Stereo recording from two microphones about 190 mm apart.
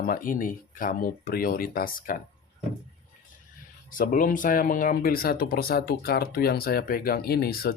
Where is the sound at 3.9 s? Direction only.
45° left (ahead or behind).